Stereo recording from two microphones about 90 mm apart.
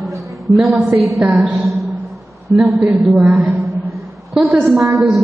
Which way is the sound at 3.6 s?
Centre (ahead or behind).